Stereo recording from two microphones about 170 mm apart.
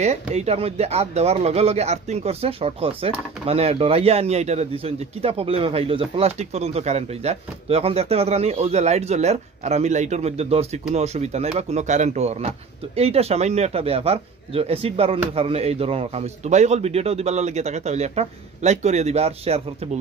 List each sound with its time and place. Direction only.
0.0 s speech: 40° right (ahead or behind)